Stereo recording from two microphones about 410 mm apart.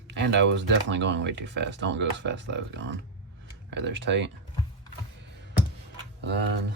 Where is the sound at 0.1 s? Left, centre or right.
Right.